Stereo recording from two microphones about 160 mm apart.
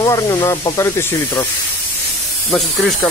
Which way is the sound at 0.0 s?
20° left (ahead or behind).